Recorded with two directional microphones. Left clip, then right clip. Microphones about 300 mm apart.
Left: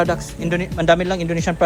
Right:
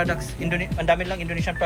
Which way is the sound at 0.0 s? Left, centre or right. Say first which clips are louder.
Left 5 dB; centre.